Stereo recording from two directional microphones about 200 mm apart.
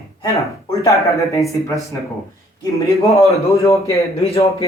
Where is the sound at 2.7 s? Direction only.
15° left (ahead or behind).